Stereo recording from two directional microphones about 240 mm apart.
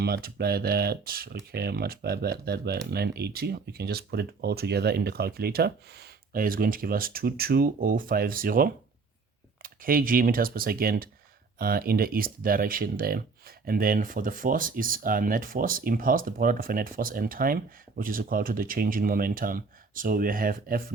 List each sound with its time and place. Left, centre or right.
0.0 s speech: right